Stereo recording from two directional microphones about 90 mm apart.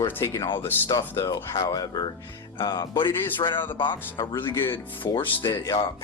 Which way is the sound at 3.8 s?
60° left (ahead or behind).